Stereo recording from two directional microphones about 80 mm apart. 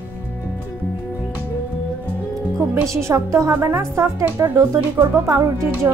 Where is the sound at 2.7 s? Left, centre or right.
Right.